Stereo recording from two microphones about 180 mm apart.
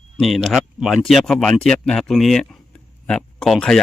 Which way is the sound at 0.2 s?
Centre (ahead or behind).